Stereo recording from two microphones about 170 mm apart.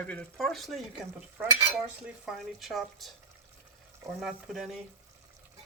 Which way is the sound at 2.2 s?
Centre (ahead or behind).